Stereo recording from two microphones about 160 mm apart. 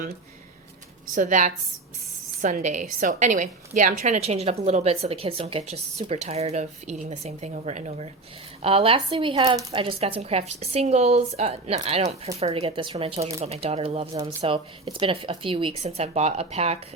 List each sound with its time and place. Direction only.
1.1 s a woman's voice: 50° right (ahead or behind); by 9.9 s 30° right (ahead or behind)
10.0 s a woman's voice: 40° right (ahead or behind)